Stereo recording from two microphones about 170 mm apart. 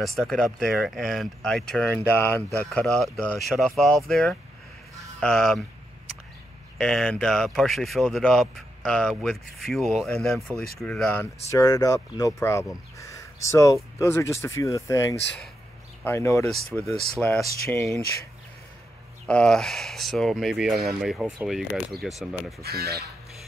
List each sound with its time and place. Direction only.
0.0 s speech: centre (ahead or behind)
6.8 s speech: 5° left (ahead or behind)
11.5 s speech: 20° left (ahead or behind)
16.7 s speech: centre (ahead or behind)
19.2 s speech: 5° left (ahead or behind)
22.6 s speech: 65° right (ahead or behind)